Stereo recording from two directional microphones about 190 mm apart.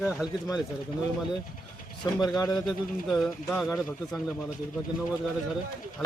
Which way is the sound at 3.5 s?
5° left (ahead or behind).